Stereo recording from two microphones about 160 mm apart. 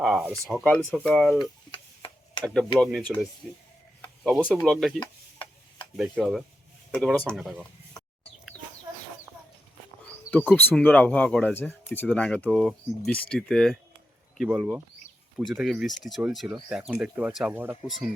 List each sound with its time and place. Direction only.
0.0 s speech: centre (ahead or behind)
1.4 s tick-tock: 30° left (ahead or behind)
2.4 s speech: 5° left (ahead or behind)
4.9 s stir: 30° left (ahead or behind)
6.2 s speech: centre (ahead or behind)
10.3 s speech: 10° left (ahead or behind); by 17.7 s 10° right (ahead or behind)